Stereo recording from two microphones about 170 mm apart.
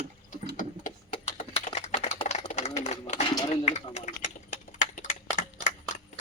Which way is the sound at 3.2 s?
30° left (ahead or behind).